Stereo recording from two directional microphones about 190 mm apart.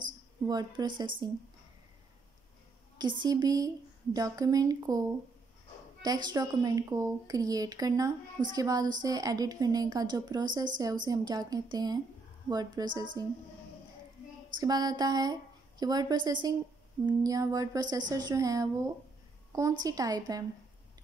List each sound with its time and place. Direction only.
0.5 s a woman's voice: 20° right (ahead or behind)
3.0 s a woman's voice: 25° right (ahead or behind)
6.0 s a woman's voice: 20° right (ahead or behind)
14.6 s a woman's voice: 20° right (ahead or behind)
19.8 s a woman's voice: 20° right (ahead or behind)